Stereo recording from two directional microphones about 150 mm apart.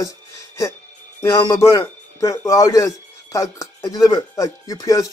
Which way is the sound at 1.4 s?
20° left (ahead or behind).